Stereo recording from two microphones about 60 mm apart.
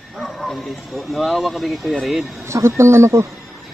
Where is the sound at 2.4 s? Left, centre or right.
Right.